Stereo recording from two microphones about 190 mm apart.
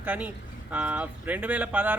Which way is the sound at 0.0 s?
10° right (ahead or behind).